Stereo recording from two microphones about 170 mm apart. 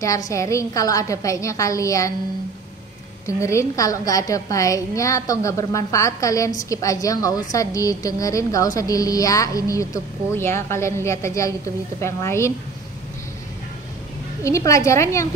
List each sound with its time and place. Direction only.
0.0 s a woman's voice: 20° left (ahead or behind)
3.3 s a woman's voice: 15° left (ahead or behind)
14.4 s a woman's voice: 20° left (ahead or behind)